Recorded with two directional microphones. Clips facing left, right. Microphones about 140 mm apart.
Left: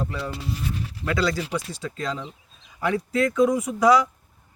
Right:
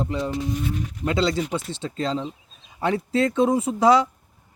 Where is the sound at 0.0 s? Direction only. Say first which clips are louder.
Right 4 dB; 20° right (ahead or behind).